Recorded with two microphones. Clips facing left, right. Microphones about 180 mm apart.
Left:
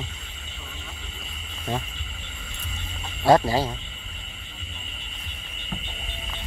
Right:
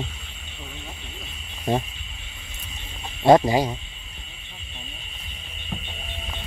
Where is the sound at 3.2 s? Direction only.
20° right (ahead or behind).